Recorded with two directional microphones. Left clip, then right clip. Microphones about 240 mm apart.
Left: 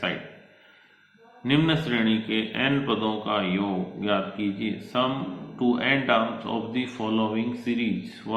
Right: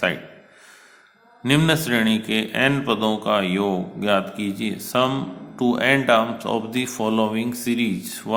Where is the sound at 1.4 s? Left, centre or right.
Right.